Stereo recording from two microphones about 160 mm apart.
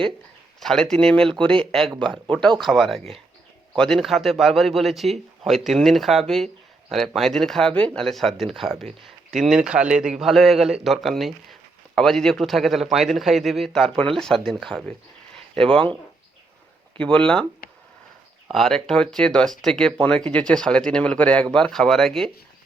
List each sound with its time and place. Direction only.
0.6 s a man's voice: 5° left (ahead or behind)
17.0 s speech: 5° left (ahead or behind)
17.6 s a sound: 70° left (ahead or behind)
18.4 s a man's voice: centre (ahead or behind)